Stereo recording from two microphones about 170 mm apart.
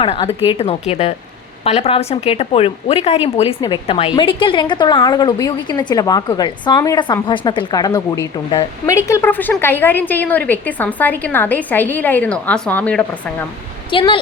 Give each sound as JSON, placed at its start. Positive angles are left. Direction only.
{"t": 0.0, "sound": "a woman's voice", "side_deg": 35}
{"t": 13.9, "sound": "speech", "side_deg": 30}